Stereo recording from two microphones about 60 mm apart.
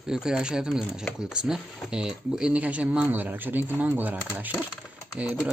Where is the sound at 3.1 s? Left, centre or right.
Right.